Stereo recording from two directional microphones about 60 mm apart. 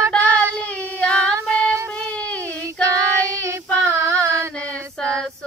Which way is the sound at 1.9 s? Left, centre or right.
Left.